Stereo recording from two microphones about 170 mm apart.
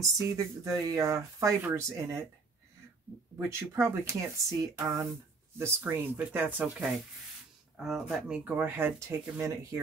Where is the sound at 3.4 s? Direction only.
15° right (ahead or behind).